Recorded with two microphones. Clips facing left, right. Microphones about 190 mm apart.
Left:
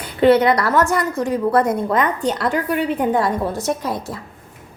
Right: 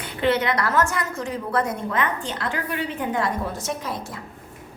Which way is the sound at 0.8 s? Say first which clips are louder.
Left 7 dB; 35° left (ahead or behind).